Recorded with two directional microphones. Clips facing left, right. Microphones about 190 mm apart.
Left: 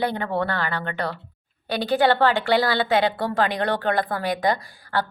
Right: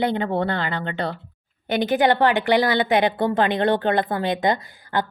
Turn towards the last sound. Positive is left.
turn(degrees=-20)  # may be behind; listen again after turning